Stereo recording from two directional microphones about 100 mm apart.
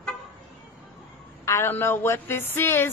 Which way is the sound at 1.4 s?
25° left (ahead or behind).